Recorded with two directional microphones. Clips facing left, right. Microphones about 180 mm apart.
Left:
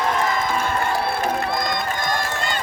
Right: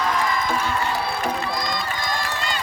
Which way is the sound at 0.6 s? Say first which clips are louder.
Left 2 dB; 55° left (ahead or behind).